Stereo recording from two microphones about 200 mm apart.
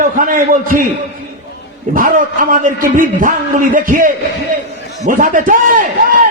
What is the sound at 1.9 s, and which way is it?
A man's voice, 45° right (ahead or behind).